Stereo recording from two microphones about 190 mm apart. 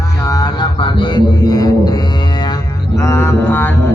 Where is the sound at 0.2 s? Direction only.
20° left (ahead or behind).